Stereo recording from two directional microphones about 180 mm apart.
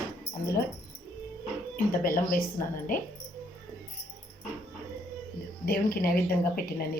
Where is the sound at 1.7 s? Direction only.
50° left (ahead or behind).